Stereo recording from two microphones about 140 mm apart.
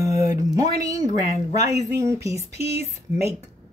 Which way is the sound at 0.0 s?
25° right (ahead or behind).